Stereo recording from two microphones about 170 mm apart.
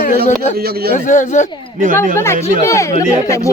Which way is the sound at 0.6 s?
65° right (ahead or behind).